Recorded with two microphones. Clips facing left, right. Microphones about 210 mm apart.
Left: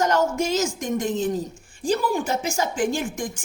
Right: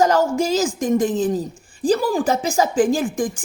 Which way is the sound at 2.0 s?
90° right.